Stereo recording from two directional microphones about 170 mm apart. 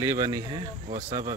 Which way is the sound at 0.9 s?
40° right (ahead or behind).